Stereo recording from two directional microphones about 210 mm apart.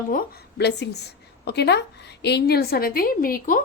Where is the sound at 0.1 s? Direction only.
45° left (ahead or behind).